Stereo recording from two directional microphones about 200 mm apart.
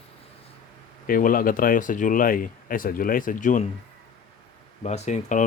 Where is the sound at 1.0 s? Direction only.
45° left (ahead or behind).